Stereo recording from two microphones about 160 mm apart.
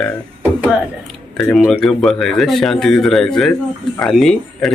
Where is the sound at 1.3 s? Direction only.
5° left (ahead or behind).